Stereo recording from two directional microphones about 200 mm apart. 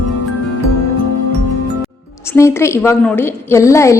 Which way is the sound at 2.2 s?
15° left (ahead or behind).